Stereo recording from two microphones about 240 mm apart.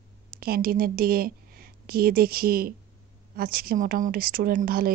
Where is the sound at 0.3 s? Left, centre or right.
Right.